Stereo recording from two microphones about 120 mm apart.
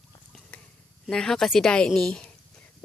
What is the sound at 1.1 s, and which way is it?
Speech, 5° left (ahead or behind).